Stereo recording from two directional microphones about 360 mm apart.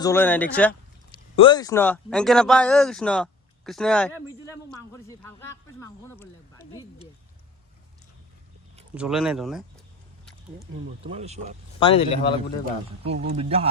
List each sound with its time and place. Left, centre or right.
0.0 s a man's voice: centre
9.0 s speech: centre
11.0 s speech: centre
11.8 s speech: centre
13.1 s speech: centre